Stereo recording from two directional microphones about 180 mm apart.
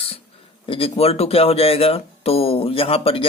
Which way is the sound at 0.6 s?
30° left (ahead or behind).